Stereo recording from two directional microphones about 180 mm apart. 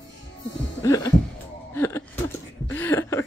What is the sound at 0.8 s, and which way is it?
Music, 15° left (ahead or behind).